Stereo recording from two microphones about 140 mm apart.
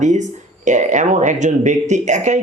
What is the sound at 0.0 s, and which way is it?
Speech, 60° right (ahead or behind).